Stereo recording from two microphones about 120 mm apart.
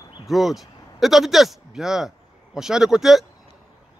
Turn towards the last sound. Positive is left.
turn(degrees=-5)  # may be behind; listen again after turning